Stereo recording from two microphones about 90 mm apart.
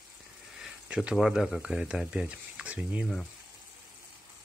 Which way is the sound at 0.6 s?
5° right (ahead or behind).